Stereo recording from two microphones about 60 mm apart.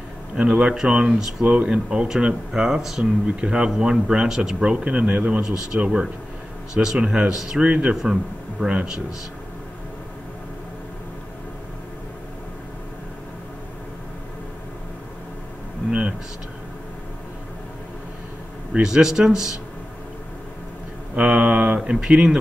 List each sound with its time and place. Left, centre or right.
0.4 s speech: centre
15.9 s a sound: centre
18.7 s speech: centre
21.1 s speech: centre